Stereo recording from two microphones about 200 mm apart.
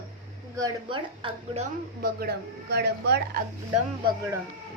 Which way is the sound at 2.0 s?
50° right (ahead or behind).